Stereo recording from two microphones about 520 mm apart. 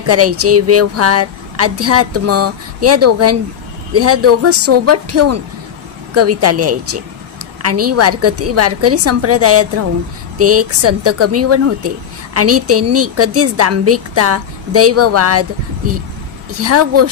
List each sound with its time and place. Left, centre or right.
0.0 s a woman's voice: right
16.5 s a woman's voice: right